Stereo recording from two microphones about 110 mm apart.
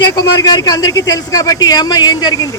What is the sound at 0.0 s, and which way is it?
A man's voice, 35° left (ahead or behind).